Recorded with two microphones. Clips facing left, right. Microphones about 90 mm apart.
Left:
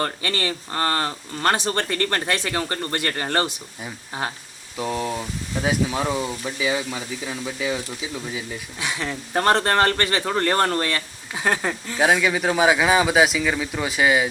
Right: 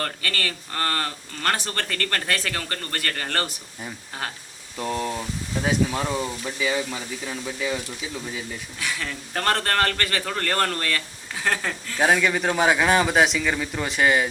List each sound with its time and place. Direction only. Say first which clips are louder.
0.0 s speech: left 3 dB; 20° left (ahead or behind)
4.8 s speech: left 1 dB; 5° left (ahead or behind)
8.8 s speech: left 3 dB; 25° left (ahead or behind)
11.9 s speech: left 1 dB; 10° left (ahead or behind)